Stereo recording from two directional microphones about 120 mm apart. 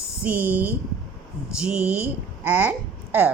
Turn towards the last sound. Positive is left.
turn(degrees=-15)  # may be behind; listen again after turning